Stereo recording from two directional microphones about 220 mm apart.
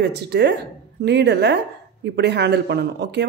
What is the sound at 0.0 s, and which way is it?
Speech, 50° right (ahead or behind).